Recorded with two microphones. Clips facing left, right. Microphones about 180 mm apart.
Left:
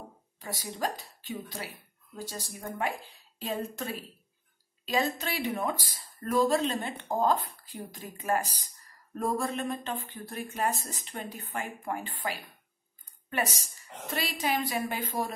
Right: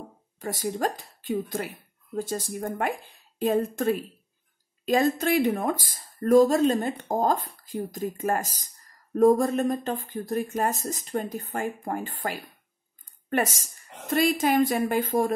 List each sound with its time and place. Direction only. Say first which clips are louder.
0.4 s speech: right 7 dB; 50° right (ahead or behind)
13.3 s speech: right 6 dB; 45° right (ahead or behind)